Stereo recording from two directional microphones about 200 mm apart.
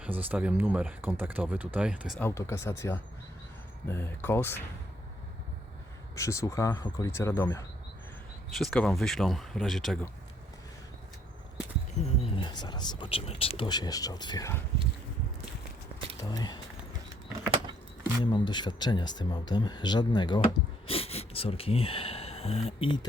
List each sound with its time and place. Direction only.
0.0 s speech: 10° right (ahead or behind)
2.1 s speech: 10° left (ahead or behind)
6.1 s speech: 15° left (ahead or behind)
8.5 s speech: centre (ahead or behind)
12.0 s speech: 25° left (ahead or behind)
16.1 s speech: 20° left (ahead or behind)
18.2 s speech: 20° left (ahead or behind)